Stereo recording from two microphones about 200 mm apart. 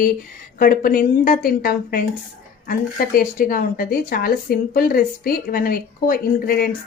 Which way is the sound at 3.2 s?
45° left (ahead or behind).